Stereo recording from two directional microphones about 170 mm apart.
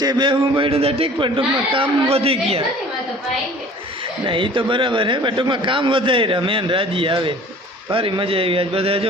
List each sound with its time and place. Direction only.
0.0 s a man's voice: 25° right (ahead or behind)
4.3 s a man's voice: 30° right (ahead or behind)